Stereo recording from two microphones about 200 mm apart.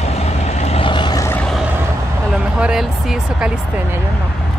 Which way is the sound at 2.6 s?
Centre (ahead or behind).